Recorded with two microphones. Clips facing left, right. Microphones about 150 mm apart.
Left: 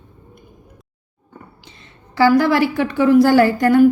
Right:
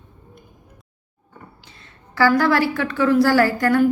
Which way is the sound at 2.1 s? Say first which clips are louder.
Left 3 dB; 15° left (ahead or behind).